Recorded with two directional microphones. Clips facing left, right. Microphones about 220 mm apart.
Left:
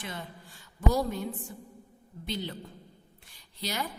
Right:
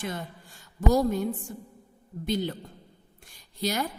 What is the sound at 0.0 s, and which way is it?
A woman's voice, 45° right (ahead or behind).